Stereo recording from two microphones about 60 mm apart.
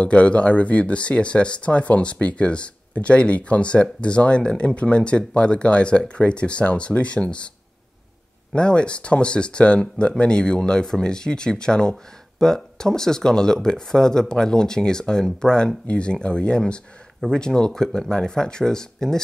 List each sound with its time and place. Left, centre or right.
0.0 s speech: left
8.5 s speech: centre